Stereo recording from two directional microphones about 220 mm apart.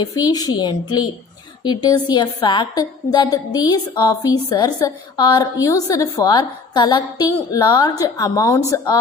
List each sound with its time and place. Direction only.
0.0 s a woman's voice: 15° left (ahead or behind)